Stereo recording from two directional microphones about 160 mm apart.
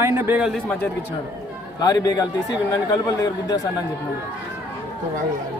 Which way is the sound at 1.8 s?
25° left (ahead or behind).